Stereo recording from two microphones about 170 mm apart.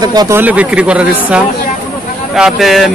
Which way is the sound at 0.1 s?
25° right (ahead or behind).